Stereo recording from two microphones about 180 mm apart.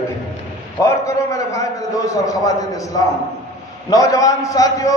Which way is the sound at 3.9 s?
20° left (ahead or behind).